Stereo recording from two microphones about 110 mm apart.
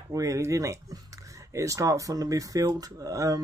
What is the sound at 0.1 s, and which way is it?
Speech, 30° right (ahead or behind).